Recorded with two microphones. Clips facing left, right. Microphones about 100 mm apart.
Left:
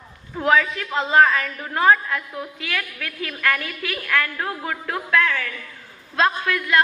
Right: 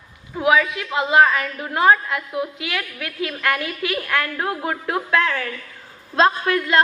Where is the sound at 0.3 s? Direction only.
10° right (ahead or behind).